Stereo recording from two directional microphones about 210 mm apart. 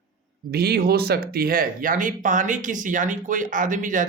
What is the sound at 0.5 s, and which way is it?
Speech, 50° right (ahead or behind).